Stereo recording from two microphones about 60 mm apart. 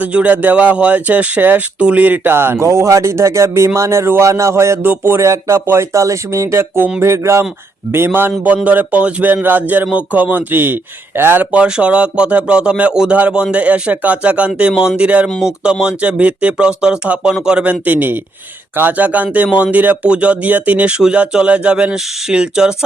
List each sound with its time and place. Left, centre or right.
0.0 s speech: right
2.6 s speech: right
7.9 s speech: right
8.6 s speech: right
11.5 s speech: centre